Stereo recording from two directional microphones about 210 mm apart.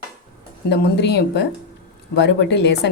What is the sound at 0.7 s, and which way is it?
Speech, 50° left (ahead or behind).